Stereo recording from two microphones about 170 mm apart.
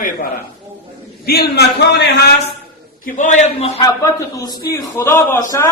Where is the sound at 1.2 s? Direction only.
65° left (ahead or behind).